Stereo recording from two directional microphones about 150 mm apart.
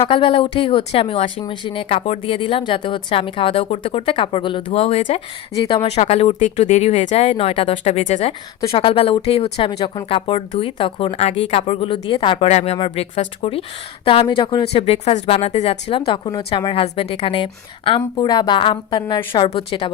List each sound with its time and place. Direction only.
0.0 s speech: 40° left (ahead or behind)
12.5 s speech: 45° left (ahead or behind)
15.9 s speech: 35° left (ahead or behind)